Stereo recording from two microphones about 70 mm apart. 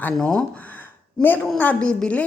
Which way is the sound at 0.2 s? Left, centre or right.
Centre.